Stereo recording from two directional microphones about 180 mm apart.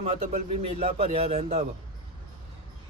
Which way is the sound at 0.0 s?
35° right (ahead or behind).